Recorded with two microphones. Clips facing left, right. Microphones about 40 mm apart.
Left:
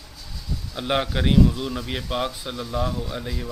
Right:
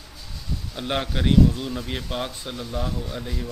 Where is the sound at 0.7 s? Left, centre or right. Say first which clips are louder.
Left 3 dB; centre.